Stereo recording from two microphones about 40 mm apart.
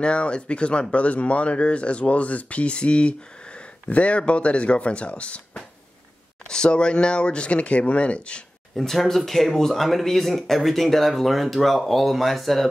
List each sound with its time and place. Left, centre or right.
0.0 s speech: left
6.5 s speech: left
8.7 s speech: centre